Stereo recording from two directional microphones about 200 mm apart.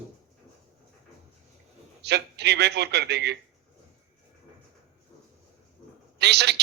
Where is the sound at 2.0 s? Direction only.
55° right (ahead or behind).